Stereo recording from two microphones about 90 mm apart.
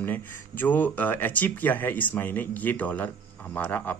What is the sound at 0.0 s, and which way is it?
Speech, 20° left (ahead or behind).